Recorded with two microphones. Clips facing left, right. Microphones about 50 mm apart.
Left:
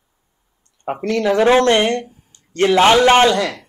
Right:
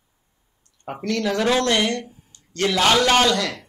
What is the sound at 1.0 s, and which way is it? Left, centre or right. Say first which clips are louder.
Speech: left 7 dB; left.